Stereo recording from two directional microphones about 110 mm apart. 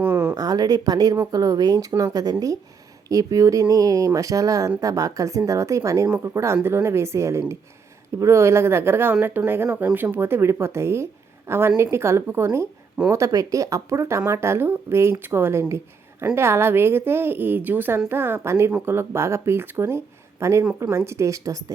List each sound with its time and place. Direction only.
0.0 s a sound: 15° right (ahead or behind)
0.3 s speech: 35° right (ahead or behind)
3.1 s speech: 30° right (ahead or behind)